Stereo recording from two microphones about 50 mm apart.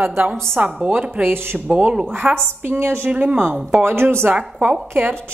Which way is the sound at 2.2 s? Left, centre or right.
Centre.